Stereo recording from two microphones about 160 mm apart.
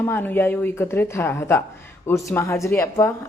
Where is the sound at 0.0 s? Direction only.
15° left (ahead or behind).